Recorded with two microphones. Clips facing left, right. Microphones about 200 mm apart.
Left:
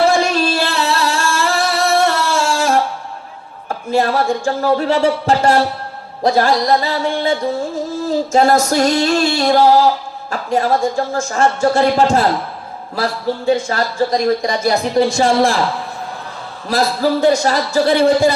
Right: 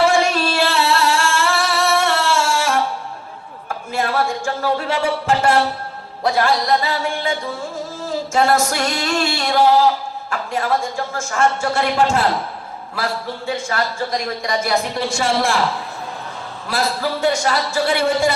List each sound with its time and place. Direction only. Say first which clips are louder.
0.1 s singing: left 2 dB; 35° left (ahead or behind)
3.7 s speech: left 6 dB; 35° left (ahead or behind)
8.3 s speech: left 3 dB; 35° left (ahead or behind)
13.5 s speech: left 5 dB; 35° left (ahead or behind)
16.6 s speech: left 6 dB; 40° left (ahead or behind)